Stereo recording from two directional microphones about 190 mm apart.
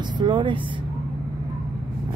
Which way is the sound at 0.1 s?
25° right (ahead or behind).